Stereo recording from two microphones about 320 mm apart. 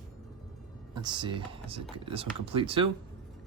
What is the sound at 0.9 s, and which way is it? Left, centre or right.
Speech, centre.